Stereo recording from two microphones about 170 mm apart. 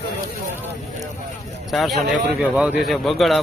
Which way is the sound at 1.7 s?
Centre (ahead or behind).